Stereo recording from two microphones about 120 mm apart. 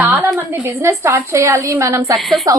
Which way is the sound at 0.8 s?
25° right (ahead or behind).